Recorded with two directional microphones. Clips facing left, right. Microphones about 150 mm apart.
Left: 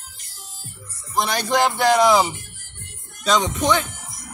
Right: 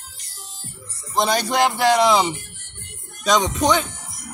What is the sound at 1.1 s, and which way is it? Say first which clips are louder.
Speech: right 1 dB; 25° right (ahead or behind).